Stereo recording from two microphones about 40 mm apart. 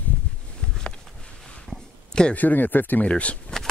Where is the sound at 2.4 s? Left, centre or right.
Left.